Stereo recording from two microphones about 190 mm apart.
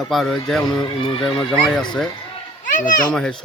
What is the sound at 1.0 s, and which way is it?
Speech, 30° left (ahead or behind).